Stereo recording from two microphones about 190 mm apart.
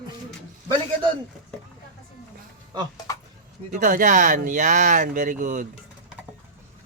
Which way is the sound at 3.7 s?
45° right (ahead or behind).